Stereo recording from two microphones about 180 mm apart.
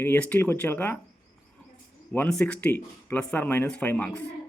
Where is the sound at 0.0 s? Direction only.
10° left (ahead or behind).